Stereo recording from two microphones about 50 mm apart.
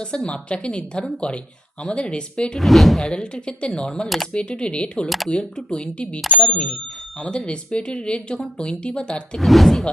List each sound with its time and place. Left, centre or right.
0.4 s speech: left
2.6 s speech: centre
3.2 s speech: centre
5.0 s speech: centre
5.3 s speech: centre
9.4 s speech: centre